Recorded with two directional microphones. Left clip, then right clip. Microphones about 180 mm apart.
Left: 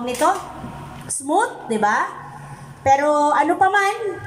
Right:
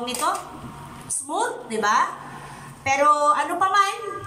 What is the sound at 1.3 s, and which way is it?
A woman's voice, 40° left (ahead or behind).